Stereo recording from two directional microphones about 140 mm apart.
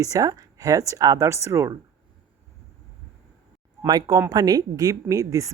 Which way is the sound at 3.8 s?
25° right (ahead or behind).